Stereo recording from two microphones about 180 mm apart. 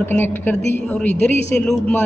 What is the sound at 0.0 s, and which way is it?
A man's voice, 10° left (ahead or behind).